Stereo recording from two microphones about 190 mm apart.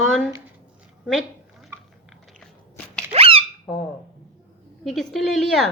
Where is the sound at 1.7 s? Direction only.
15° right (ahead or behind).